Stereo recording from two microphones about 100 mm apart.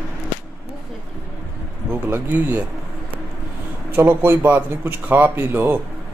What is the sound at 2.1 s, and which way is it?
Speech, 20° right (ahead or behind).